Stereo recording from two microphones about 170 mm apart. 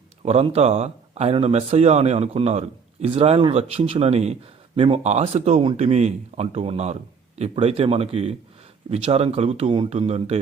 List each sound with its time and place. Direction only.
0.2 s speech: 40° right (ahead or behind)